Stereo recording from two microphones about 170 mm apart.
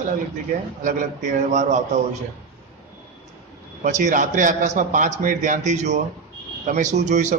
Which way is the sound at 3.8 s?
45° right (ahead or behind).